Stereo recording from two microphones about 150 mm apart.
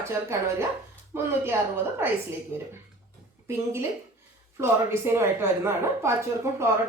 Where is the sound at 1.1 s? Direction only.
15° right (ahead or behind).